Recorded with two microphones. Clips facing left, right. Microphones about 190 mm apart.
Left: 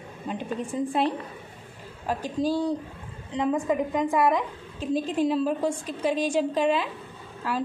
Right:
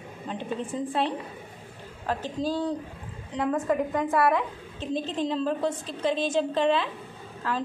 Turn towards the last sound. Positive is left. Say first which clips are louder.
# left 1 dB
turn(degrees=10)  # may be behind; listen again after turning